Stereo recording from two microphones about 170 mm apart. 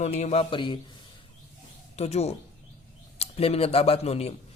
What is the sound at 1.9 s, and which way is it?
Speech, 40° left (ahead or behind).